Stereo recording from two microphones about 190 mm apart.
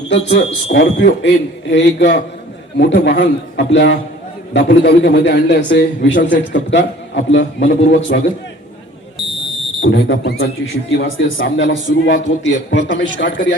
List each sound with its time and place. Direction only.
0.1 s a man's voice: 65° left (ahead or behind)
9.8 s a man's voice: 75° left (ahead or behind)